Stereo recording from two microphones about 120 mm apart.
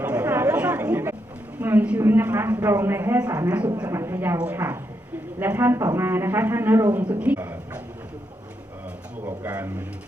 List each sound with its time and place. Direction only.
0.0 s chatter: 10° right (ahead or behind)
1.5 s a sound: 15° right (ahead or behind)
2.0 s speech: 20° right (ahead or behind)
9.2 s speech: 15° right (ahead or behind)